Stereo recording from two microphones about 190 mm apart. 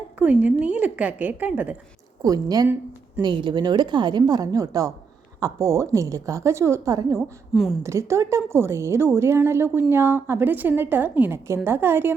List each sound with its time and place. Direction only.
0.2 s a woman's voice: 10° right (ahead or behind)
2.2 s a woman's voice: 20° right (ahead or behind)
7.2 s a woman's voice: centre (ahead or behind)
7.8 s a woman's voice: 15° right (ahead or behind)